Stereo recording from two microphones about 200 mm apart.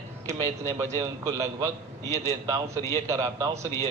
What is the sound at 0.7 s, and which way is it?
A man's voice, 15° right (ahead or behind).